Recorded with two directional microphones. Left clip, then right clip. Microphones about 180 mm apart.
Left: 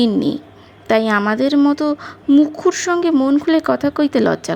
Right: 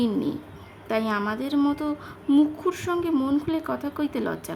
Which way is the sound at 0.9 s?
35° left (ahead or behind).